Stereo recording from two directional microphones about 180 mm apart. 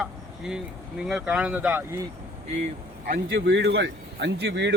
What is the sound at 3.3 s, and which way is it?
Speech, 75° right (ahead or behind).